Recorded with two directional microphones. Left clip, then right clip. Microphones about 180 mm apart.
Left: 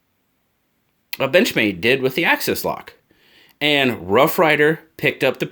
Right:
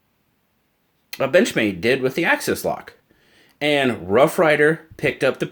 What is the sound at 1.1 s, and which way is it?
Speech, 20° left (ahead or behind).